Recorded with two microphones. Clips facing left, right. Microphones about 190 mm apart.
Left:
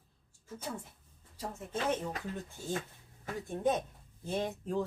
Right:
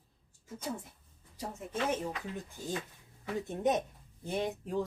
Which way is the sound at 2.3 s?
45° left (ahead or behind).